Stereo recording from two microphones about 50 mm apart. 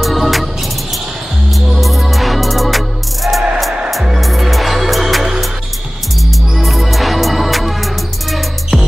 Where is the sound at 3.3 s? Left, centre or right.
Centre.